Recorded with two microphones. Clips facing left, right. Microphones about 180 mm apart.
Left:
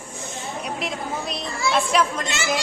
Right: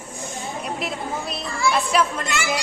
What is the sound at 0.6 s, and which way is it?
A woman's voice, 5° right (ahead or behind).